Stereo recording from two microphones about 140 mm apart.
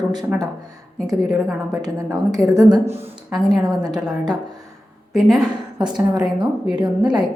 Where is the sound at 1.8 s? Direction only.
25° right (ahead or behind).